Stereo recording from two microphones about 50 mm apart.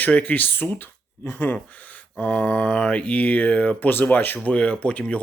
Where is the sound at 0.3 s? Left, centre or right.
Left.